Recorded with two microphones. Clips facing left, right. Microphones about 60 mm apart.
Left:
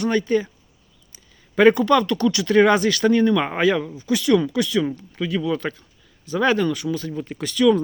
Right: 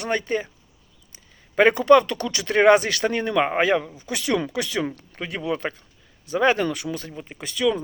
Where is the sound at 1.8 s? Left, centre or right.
Right.